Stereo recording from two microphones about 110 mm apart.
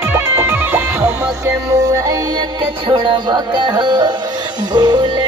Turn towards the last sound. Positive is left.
turn(degrees=-40)  # may be behind; listen again after turning